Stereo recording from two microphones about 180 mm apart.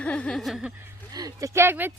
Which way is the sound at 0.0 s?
5° left (ahead or behind).